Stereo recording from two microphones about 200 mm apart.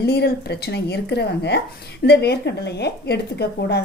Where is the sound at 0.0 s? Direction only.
55° left (ahead or behind).